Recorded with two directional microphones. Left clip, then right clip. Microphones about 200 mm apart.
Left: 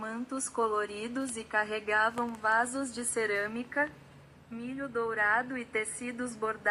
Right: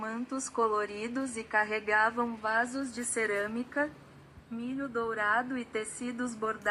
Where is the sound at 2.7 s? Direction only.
20° left (ahead or behind).